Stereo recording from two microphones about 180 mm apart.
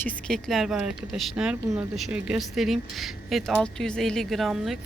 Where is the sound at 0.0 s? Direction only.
5° left (ahead or behind).